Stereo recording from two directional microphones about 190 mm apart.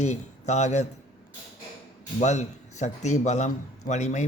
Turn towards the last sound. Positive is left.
turn(degrees=35)  # may be behind; listen again after turning